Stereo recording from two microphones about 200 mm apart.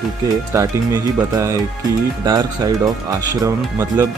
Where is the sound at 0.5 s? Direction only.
15° right (ahead or behind).